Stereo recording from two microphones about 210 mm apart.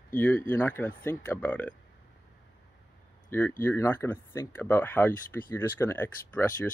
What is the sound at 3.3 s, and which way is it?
Speech, 10° left (ahead or behind).